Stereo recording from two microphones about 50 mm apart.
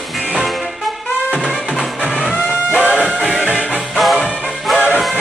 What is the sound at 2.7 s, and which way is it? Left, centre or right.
Music, right.